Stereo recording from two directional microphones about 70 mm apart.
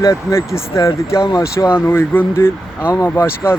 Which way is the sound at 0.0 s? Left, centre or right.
Left.